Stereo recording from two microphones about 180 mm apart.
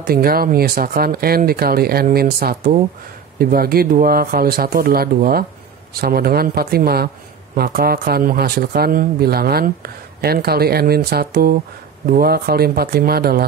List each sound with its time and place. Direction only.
0.0 s speech: 55° right (ahead or behind)